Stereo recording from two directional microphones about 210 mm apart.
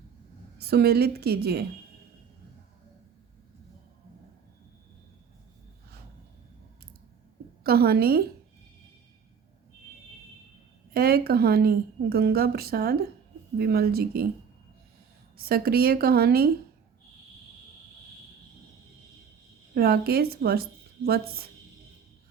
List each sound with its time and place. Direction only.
0.6 s a woman's voice: 50° right (ahead or behind)
7.6 s a woman's voice: 45° right (ahead or behind)
10.9 s a woman's voice: 50° right (ahead or behind)
15.4 s a woman's voice: 45° right (ahead or behind)
19.7 s a woman's voice: 45° right (ahead or behind)